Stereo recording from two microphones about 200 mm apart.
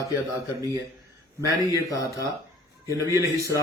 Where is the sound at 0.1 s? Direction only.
15° right (ahead or behind).